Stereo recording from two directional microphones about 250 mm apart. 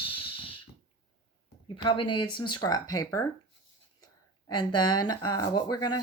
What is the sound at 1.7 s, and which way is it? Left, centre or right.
Speech, centre.